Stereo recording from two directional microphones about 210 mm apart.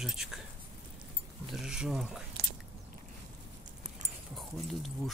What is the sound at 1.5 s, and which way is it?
Speech, centre (ahead or behind).